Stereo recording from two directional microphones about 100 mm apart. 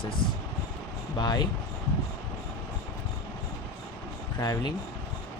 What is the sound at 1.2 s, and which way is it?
Speech, 45° left (ahead or behind).